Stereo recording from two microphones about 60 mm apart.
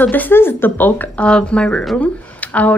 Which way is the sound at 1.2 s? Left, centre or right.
Centre.